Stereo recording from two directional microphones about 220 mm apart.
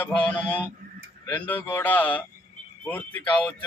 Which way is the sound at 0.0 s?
5° left (ahead or behind).